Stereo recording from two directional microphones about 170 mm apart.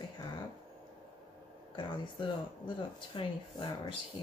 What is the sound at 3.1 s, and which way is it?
Speech, 30° left (ahead or behind).